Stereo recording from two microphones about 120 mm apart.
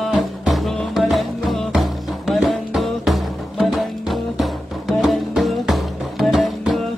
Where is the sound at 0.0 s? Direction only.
Centre (ahead or behind).